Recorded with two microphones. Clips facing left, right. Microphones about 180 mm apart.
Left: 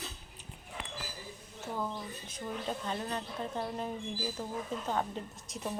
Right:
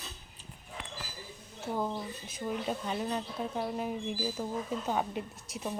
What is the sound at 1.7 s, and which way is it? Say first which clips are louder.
Speech: right 4 dB; 25° right (ahead or behind).